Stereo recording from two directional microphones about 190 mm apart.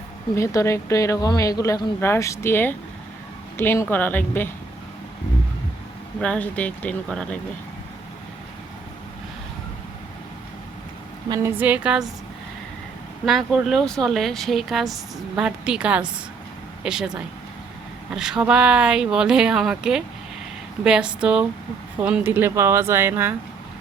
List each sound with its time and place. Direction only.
0.3 s speech: 15° left (ahead or behind)
6.1 s speech: 5° left (ahead or behind)
11.3 s speech: 10° right (ahead or behind)
13.2 s speech: centre (ahead or behind)